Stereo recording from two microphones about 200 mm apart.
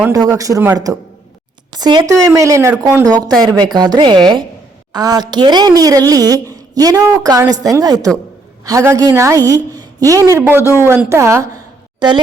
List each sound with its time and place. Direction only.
0.0 s a woman's voice: 15° right (ahead or behind)